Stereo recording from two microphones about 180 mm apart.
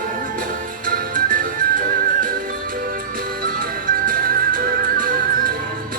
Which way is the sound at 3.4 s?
55° right (ahead or behind).